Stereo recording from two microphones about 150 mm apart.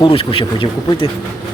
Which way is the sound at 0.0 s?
35° left (ahead or behind).